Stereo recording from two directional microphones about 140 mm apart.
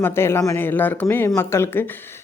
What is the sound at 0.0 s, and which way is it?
A man's voice, 15° left (ahead or behind).